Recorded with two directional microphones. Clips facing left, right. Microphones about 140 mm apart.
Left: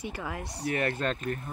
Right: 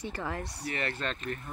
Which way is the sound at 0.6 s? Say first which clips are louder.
Left 7 dB; 50° left (ahead or behind).